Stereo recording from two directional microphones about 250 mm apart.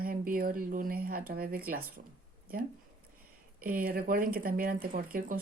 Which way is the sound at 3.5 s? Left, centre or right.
Right.